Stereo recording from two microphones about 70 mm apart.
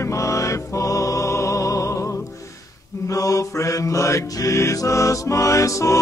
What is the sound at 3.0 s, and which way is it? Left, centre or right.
Mantra, left.